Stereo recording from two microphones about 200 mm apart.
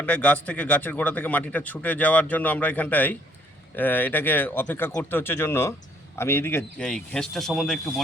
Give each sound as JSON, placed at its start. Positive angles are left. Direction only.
{"t": 0.0, "sound": "a man's voice", "side_deg": 5}